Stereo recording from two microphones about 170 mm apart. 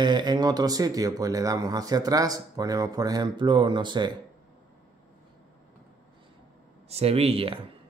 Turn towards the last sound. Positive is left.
turn(degrees=-35)  # may be behind; listen again after turning